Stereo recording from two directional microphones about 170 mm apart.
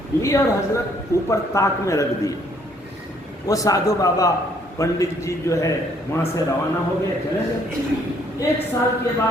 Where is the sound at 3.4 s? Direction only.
20° left (ahead or behind).